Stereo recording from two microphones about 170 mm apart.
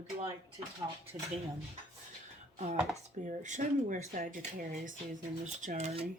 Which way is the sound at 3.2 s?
45° right (ahead or behind).